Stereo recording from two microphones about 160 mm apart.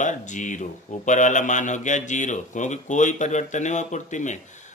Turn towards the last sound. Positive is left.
turn(degrees=50)  # may be behind; listen again after turning